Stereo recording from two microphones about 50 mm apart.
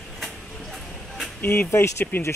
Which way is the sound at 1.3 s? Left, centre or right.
Left.